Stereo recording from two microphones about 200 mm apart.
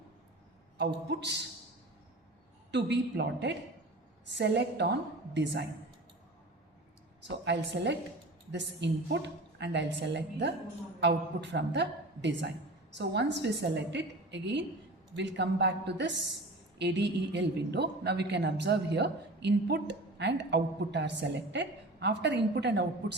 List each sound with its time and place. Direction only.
2.7 s a man's voice: 60° right (ahead or behind)
7.3 s a man's voice: 60° right (ahead or behind)